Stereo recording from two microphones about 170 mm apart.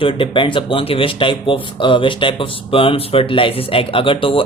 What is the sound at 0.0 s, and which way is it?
Speech, 30° left (ahead or behind).